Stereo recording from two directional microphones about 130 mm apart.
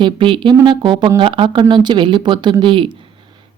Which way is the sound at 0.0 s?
40° right (ahead or behind).